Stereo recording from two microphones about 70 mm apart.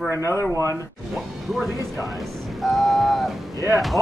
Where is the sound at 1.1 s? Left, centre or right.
Centre.